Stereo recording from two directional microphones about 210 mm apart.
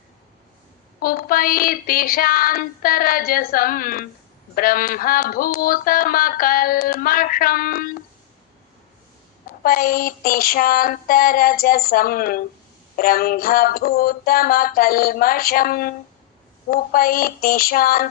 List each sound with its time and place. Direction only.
0.9 s speech: 45° left (ahead or behind)
9.6 s speech: 45° left (ahead or behind)